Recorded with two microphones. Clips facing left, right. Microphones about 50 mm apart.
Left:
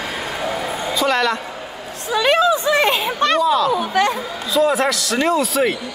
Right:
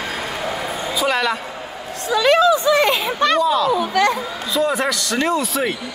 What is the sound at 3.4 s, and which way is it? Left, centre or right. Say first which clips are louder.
Speech: even; centre.